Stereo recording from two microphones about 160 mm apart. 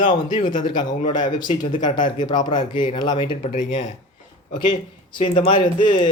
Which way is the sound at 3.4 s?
55° left (ahead or behind).